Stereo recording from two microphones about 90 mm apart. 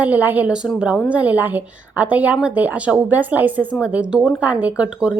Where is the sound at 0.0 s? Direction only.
20° right (ahead or behind).